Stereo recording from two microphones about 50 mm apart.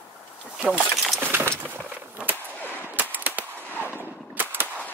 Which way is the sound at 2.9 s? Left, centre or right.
Right.